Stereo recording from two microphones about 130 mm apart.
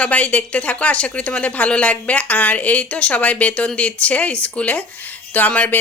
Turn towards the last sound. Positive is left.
turn(degrees=15)  # may be behind; listen again after turning